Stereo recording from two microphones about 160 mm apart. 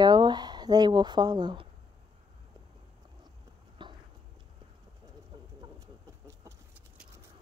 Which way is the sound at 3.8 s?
30° right (ahead or behind).